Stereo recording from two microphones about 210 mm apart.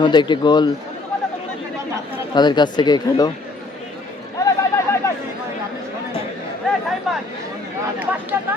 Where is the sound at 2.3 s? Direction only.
20° left (ahead or behind).